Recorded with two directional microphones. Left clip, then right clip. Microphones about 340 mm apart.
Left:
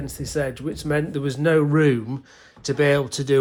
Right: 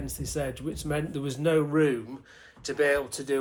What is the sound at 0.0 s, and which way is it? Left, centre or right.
Speech, left.